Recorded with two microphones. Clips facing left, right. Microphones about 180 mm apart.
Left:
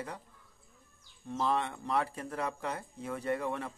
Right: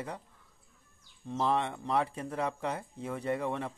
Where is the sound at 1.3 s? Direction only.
25° right (ahead or behind).